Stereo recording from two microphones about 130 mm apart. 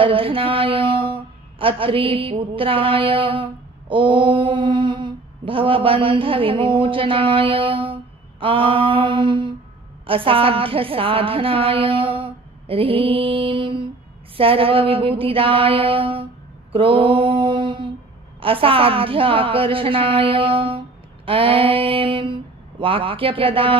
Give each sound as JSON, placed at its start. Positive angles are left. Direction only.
{"t": 0.0, "sound": "a woman's voice", "side_deg": -45}
{"t": 3.9, "sound": "mantra", "side_deg": -40}
{"t": 10.0, "sound": "a woman's voice", "side_deg": -45}
{"t": 16.7, "sound": "mantra", "side_deg": -40}
{"t": 18.4, "sound": "a woman's voice", "side_deg": -45}